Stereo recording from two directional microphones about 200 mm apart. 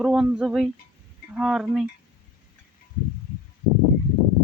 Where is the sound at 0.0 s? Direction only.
5° right (ahead or behind).